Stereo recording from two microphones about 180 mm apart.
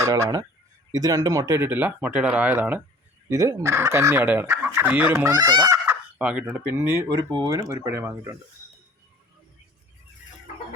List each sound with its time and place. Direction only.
0.0 s speech: 20° right (ahead or behind)